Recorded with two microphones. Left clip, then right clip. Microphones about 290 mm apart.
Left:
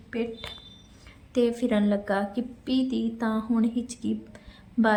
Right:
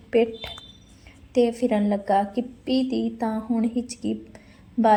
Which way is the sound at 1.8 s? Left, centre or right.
Left.